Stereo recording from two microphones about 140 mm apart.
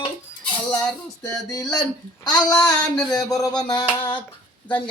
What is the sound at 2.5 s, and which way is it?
Speech, 5° left (ahead or behind).